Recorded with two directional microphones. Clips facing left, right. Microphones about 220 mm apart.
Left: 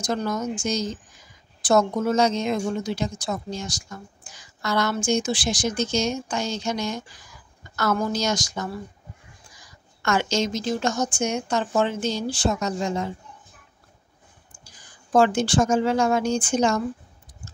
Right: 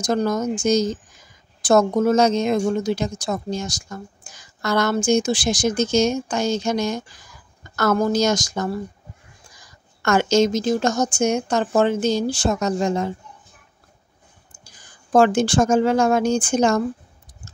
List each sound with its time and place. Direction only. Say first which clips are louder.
0.0 s speech: right 5 dB; 40° right (ahead or behind)
10.0 s speech: right 6 dB; 45° right (ahead or behind)
15.1 s speech: right 3 dB; 50° right (ahead or behind)